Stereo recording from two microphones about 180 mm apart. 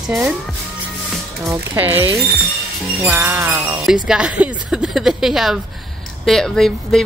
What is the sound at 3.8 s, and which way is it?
A woman's voice, 5° right (ahead or behind).